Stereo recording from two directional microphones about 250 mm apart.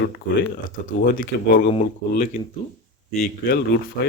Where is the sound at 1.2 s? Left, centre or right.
Left.